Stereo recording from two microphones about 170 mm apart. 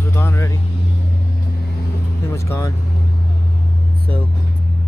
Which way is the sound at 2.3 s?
15° left (ahead or behind).